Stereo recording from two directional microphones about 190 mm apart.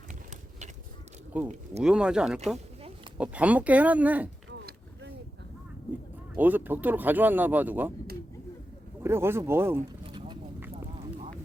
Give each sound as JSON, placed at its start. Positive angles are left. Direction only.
{"t": 1.3, "sound": "speech", "side_deg": -10}
{"t": 6.3, "sound": "speech", "side_deg": -10}
{"t": 9.0, "sound": "speech", "side_deg": -10}
{"t": 10.0, "sound": "a sound", "side_deg": -25}